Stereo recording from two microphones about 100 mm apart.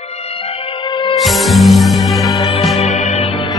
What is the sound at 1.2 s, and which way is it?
Music, centre (ahead or behind).